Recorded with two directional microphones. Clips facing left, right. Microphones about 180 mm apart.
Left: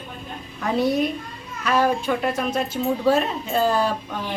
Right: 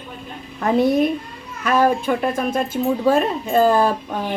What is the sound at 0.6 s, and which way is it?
Speech, 50° right (ahead or behind).